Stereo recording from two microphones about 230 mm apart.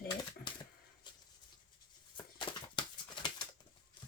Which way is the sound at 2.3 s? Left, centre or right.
Centre.